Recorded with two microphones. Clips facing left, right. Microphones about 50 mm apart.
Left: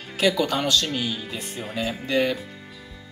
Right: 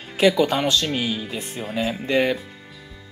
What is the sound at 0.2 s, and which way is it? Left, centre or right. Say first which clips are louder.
Speech: right 4 dB; right.